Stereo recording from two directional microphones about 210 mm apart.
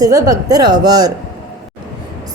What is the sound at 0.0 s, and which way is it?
A woman's voice, 15° right (ahead or behind).